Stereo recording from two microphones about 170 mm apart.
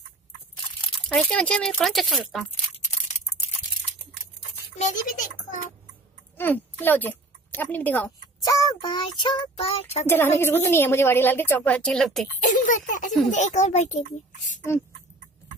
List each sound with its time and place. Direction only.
1.0 s speech: 5° left (ahead or behind)
4.7 s a child's voice: 45° left (ahead or behind)
6.3 s speech: 10° left (ahead or behind)
8.4 s child singing: 20° left (ahead or behind); by 10.0 s 35° left (ahead or behind)
10.0 s a woman's voice: 15° left (ahead or behind)
12.4 s a child's voice: 50° left (ahead or behind)